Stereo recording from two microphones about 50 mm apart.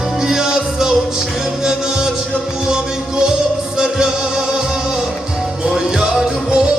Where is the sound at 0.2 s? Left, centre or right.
Centre.